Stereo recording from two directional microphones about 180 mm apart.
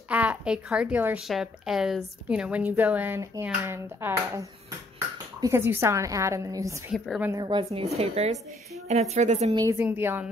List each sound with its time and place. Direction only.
0.1 s speech: 10° right (ahead or behind)
6.9 s a woman's voice: 5° right (ahead or behind)
7.2 s a woman's voice: 25° right (ahead or behind)
9.6 s speech: 15° right (ahead or behind)